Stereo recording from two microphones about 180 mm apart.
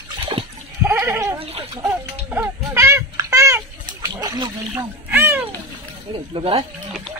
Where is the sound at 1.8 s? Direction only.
10° right (ahead or behind).